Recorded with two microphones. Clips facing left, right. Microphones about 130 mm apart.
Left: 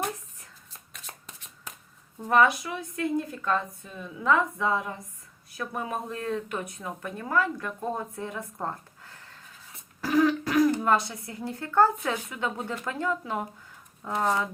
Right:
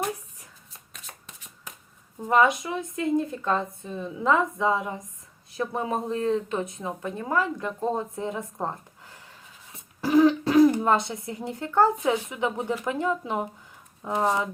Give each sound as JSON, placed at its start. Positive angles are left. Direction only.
{"t": 2.2, "sound": "speech", "side_deg": -15}